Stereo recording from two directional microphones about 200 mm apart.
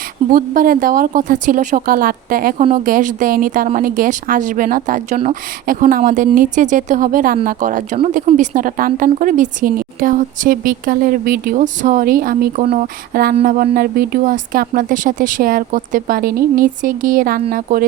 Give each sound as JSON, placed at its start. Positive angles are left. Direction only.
{"t": 0.3, "sound": "a woman's voice", "side_deg": -45}